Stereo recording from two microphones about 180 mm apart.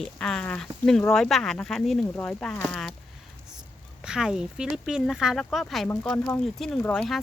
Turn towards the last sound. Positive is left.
turn(degrees=0)  # may be behind; listen again after turning